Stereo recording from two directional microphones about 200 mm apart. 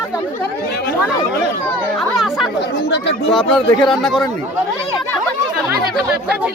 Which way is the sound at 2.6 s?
60° left (ahead or behind).